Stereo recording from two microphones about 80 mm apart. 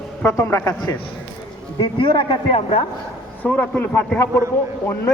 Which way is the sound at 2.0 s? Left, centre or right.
Left.